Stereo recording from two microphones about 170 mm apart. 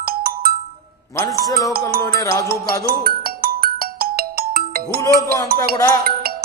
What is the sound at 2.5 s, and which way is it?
Music, 60° right (ahead or behind).